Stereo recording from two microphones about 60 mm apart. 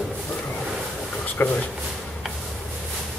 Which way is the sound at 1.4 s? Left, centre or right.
Left.